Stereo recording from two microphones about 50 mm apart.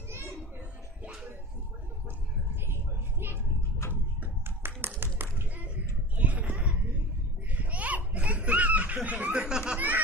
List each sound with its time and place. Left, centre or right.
0.1 s children playing: right
2.7 s vehicle: right
3.8 s a sound: left
4.6 s clapping: right
6.1 s a sound: right
7.5 s laughter: right
9.3 s laughter: centre